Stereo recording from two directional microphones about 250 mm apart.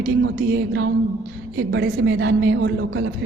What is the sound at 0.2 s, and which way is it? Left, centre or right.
A woman's voice, right.